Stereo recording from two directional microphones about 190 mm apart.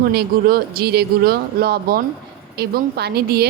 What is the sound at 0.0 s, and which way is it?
A woman's voice, 55° right (ahead or behind).